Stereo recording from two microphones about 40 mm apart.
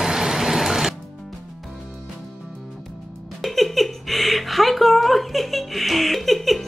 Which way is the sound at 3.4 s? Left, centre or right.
Centre.